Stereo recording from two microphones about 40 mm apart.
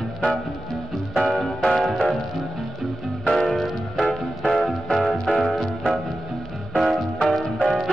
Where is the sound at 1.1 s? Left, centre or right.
Centre.